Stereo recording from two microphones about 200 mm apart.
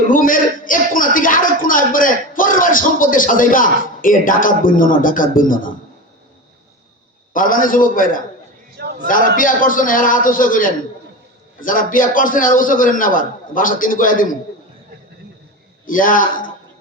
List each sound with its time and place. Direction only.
0.1 s speech: 45° left (ahead or behind)
7.3 s speech: 45° left (ahead or behind)
8.8 s a sound: 55° right (ahead or behind)
9.0 s speech: 45° left (ahead or behind)
15.9 s speech: 45° left (ahead or behind)